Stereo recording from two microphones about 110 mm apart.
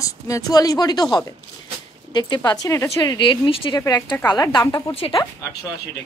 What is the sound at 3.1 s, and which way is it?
Speech, 50° left (ahead or behind).